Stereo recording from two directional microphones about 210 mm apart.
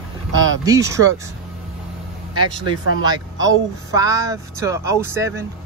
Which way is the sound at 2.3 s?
20° right (ahead or behind).